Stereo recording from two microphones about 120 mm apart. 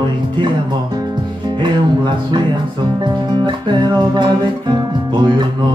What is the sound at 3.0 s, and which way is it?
Music, 40° right (ahead or behind).